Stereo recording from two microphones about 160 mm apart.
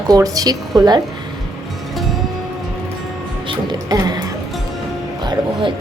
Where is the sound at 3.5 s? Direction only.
25° right (ahead or behind).